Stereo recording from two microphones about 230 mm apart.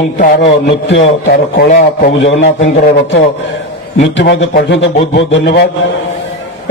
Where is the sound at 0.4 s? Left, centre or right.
Left.